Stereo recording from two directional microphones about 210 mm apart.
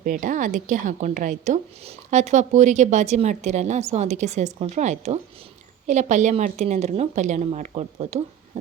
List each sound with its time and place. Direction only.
0.0 s a woman's voice: 40° right (ahead or behind)